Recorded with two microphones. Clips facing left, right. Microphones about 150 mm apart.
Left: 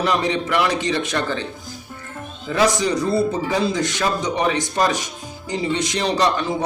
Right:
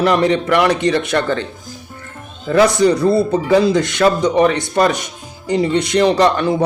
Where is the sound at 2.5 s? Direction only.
60° right (ahead or behind).